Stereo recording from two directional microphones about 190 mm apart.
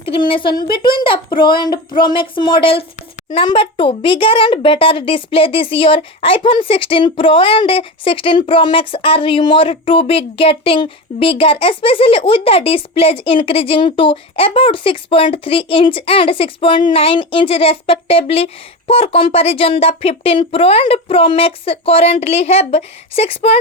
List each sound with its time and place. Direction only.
0.0 s a child's voice: 30° left (ahead or behind)